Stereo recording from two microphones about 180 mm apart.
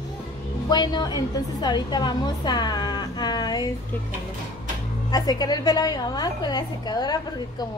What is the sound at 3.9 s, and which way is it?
Speech, 10° left (ahead or behind).